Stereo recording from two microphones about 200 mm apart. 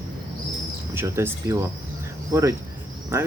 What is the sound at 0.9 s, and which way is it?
Speech, 10° right (ahead or behind).